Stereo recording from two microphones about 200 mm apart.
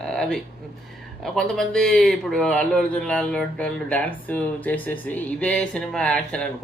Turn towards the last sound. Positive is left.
turn(degrees=5)  # may be behind; listen again after turning